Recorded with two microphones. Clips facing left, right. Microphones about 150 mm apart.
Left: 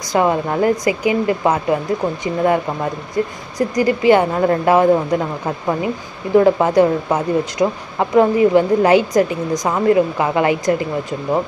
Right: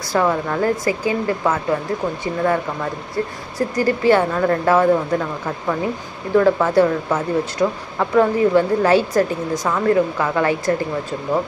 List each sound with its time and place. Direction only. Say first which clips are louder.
0.1 s speech: left 2 dB; 20° left (ahead or behind)